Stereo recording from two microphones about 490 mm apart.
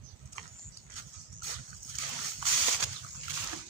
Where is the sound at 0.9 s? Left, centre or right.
Right.